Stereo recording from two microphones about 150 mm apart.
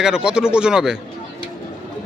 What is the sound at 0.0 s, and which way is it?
Speech, 5° right (ahead or behind).